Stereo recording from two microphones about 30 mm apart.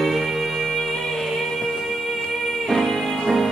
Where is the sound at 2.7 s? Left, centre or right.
Centre.